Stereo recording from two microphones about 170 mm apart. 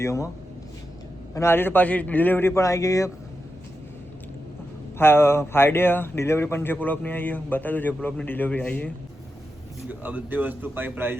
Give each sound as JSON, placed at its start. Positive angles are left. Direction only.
{"t": 0.0, "sound": "speech", "side_deg": 15}
{"t": 1.3, "sound": "speech", "side_deg": 15}
{"t": 4.9, "sound": "speech", "side_deg": 15}
{"t": 9.9, "sound": "speech", "side_deg": -10}